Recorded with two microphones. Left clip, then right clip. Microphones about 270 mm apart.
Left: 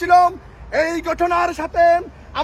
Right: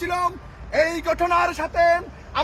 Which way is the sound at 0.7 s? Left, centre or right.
Left.